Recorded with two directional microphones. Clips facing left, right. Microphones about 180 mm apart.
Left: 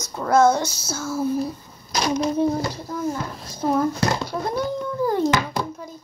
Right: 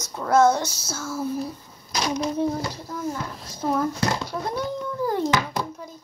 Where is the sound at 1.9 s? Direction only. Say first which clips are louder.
Left 3 dB; 40° left (ahead or behind).